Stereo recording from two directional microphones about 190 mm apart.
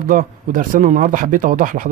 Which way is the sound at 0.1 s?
45° right (ahead or behind).